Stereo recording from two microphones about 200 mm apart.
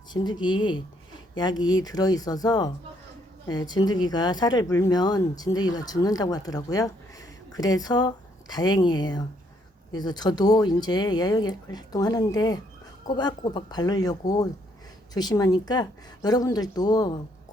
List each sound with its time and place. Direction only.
0.1 s speech: 20° left (ahead or behind)
1.8 s speech: 20° left (ahead or behind)